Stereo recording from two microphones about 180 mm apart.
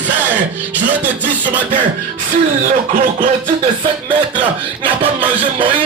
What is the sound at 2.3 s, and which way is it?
Speech, 45° right (ahead or behind).